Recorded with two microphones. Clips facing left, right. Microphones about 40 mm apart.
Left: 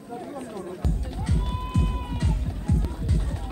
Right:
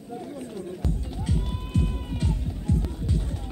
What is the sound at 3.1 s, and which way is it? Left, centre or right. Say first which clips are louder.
Run: even; left.